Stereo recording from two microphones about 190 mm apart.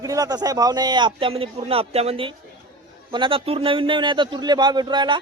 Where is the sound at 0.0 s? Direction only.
20° right (ahead or behind).